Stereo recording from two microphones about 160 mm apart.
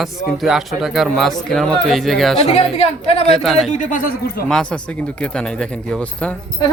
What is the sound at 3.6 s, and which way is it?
Speech, 50° left (ahead or behind).